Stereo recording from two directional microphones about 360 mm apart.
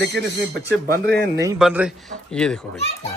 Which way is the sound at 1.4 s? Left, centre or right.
Centre.